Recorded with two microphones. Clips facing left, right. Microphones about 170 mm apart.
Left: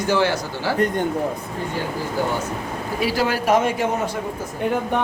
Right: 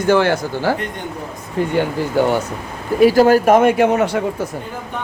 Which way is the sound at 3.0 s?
45° right (ahead or behind).